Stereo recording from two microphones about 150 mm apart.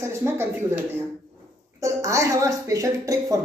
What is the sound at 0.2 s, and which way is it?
Speech, 15° right (ahead or behind).